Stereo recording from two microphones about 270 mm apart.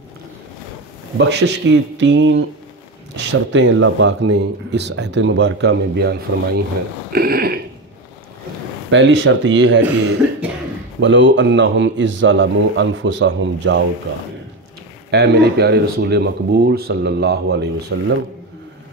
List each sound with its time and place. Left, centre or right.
1.1 s speech: right
7.1 s a sound: right
8.9 s a man's voice: right
11.0 s a man's voice: right
15.0 s speech: right